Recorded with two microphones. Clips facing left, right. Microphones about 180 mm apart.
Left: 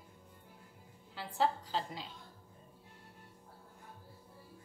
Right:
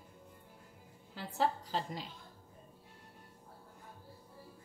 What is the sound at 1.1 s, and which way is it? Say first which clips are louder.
Speech: even; 45° right (ahead or behind).